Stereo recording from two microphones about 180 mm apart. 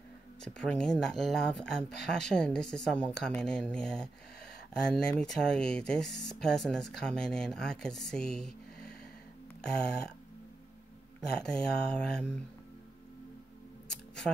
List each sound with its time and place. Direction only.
0.4 s speech: 5° left (ahead or behind)
11.1 s speech: 5° left (ahead or behind)